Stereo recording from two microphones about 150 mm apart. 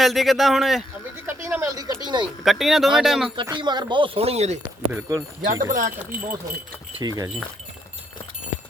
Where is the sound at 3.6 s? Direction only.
30° right (ahead or behind); by 4.6 s 45° right (ahead or behind).